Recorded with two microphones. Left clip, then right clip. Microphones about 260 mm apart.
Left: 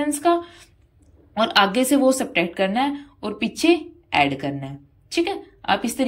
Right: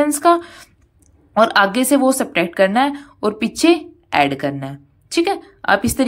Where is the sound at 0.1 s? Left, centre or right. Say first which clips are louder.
Right 6 dB; centre.